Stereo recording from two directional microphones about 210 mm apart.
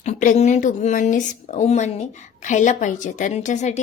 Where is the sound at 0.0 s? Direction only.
35° left (ahead or behind).